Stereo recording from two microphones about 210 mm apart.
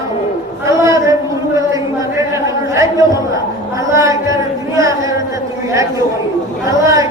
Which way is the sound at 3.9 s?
15° right (ahead or behind).